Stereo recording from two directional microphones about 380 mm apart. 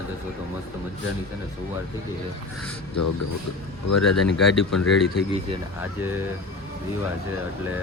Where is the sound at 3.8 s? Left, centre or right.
Left.